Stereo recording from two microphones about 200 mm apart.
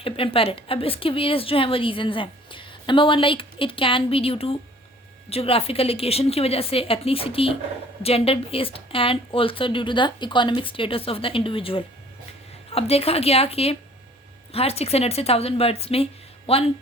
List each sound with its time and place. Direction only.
0.0 s a woman's voice: 25° left (ahead or behind)